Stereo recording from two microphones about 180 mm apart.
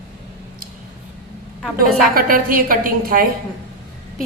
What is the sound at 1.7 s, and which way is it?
A woman's voice, 55° right (ahead or behind).